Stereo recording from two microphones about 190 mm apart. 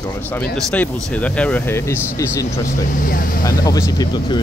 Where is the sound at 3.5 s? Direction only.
15° left (ahead or behind).